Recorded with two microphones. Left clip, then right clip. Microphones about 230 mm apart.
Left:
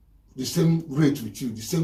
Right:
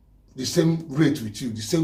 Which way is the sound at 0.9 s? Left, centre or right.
Centre.